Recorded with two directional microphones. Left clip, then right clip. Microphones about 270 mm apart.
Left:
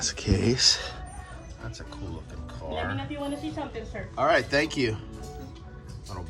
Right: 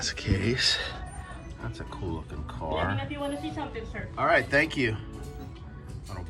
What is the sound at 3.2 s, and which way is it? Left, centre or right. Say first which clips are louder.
Speech: even; left.